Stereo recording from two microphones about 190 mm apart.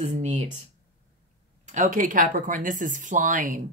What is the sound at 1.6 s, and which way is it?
A woman's voice, 45° right (ahead or behind).